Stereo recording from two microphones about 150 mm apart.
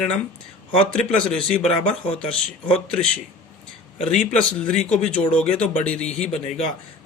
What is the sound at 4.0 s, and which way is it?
Speech, 45° left (ahead or behind).